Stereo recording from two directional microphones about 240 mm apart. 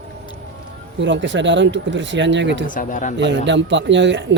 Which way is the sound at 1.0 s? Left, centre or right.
Right.